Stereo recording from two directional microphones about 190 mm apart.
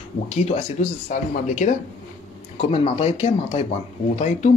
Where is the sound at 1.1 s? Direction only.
40° left (ahead or behind).